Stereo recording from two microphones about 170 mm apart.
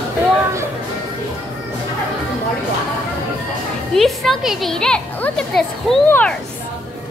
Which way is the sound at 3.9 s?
Centre (ahead or behind).